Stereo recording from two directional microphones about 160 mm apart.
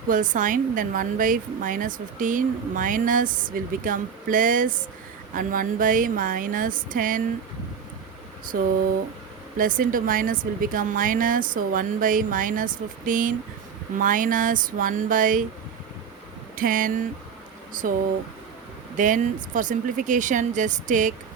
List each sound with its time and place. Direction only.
0.1 s a woman's voice: 55° right (ahead or behind)
9.6 s a woman's voice: 60° right (ahead or behind)
16.6 s a woman's voice: 60° right (ahead or behind)
18.9 s speech: 55° right (ahead or behind)